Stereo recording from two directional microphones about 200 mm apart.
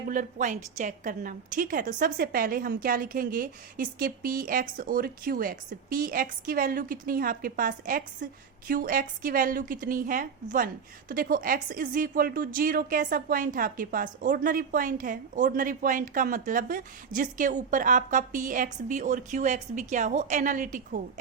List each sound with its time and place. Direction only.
0.1 s a woman's voice: 40° right (ahead or behind)